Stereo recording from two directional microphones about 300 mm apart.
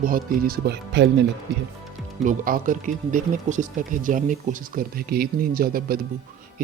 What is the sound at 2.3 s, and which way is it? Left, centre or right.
Speech, right.